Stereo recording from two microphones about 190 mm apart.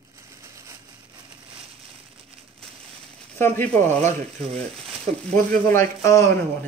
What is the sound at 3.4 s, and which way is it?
Speech, 10° left (ahead or behind).